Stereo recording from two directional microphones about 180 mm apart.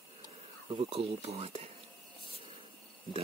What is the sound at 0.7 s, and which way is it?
Speech, 30° right (ahead or behind).